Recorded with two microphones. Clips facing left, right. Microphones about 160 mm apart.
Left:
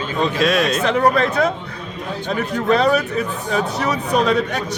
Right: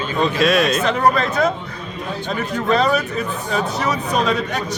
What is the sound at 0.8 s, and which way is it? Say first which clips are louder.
A man's voice: left 1 dB; 65° left (ahead or behind).